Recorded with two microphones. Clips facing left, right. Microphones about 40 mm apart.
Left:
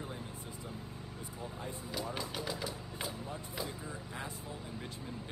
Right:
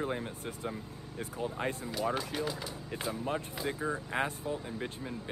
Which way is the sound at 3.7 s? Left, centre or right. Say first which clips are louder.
Right 10 dB; right.